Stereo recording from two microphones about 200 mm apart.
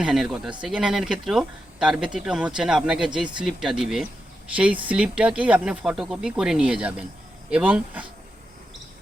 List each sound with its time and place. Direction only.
0.0 s speech: centre (ahead or behind)